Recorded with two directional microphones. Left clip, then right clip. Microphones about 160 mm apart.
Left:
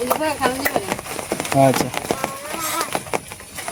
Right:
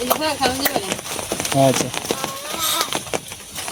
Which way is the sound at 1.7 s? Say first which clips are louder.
Left 1 dB; 20° left (ahead or behind).